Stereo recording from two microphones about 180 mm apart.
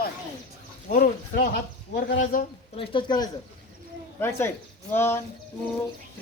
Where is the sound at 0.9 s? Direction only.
55° left (ahead or behind).